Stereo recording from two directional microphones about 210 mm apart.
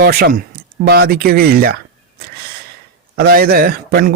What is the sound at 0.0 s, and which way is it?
A man's voice, 50° right (ahead or behind).